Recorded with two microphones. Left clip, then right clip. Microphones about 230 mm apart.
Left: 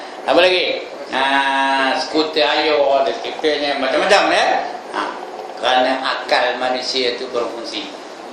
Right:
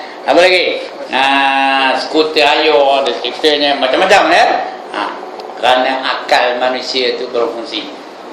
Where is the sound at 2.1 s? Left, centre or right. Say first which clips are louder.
Right 6 dB; centre.